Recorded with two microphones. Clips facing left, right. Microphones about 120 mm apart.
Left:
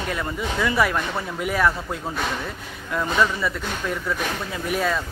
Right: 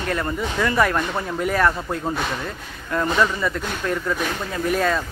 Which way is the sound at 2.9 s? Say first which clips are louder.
Right 2 dB; centre (ahead or behind).